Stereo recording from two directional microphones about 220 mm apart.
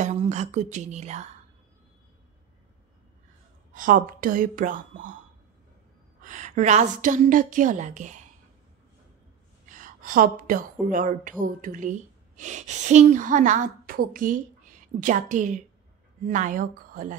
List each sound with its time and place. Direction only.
0.0 s speech: 30° right (ahead or behind)
3.7 s a woman's voice: 40° right (ahead or behind)
6.2 s a woman's voice: 35° right (ahead or behind)
9.7 s a woman's voice: 35° right (ahead or behind)